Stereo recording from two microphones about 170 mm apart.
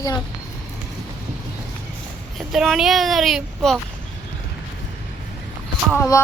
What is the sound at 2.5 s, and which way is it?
Speech, centre (ahead or behind).